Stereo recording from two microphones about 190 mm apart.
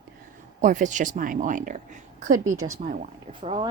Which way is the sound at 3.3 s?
25° right (ahead or behind).